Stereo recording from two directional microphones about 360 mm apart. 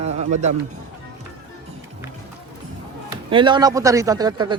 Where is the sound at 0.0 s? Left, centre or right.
Centre.